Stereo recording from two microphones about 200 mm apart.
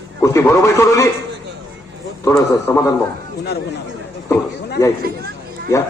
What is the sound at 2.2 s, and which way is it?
Speech, 15° left (ahead or behind).